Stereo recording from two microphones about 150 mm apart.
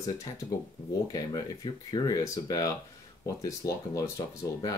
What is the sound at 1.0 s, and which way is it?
Speech, 25° left (ahead or behind).